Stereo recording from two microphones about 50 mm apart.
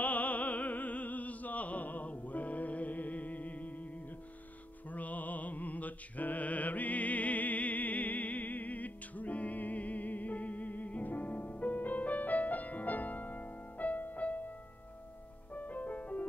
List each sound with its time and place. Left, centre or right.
0.0 s opera: left
4.8 s music: left
15.5 s music: left